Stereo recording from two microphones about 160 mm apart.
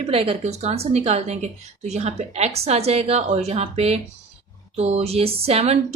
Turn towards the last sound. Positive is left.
turn(degrees=-40)  # may be behind; listen again after turning